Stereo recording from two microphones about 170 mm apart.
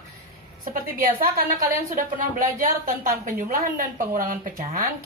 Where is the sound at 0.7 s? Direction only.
55° right (ahead or behind).